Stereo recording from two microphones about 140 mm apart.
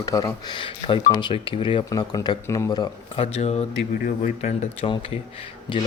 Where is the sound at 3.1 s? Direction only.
45° left (ahead or behind).